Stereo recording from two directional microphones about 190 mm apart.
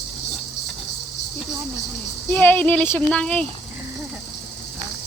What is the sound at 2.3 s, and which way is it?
Speech, 10° left (ahead or behind).